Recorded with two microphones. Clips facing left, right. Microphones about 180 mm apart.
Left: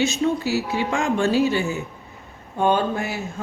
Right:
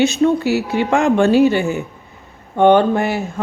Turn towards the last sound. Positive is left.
turn(degrees=-65)  # may be behind; listen again after turning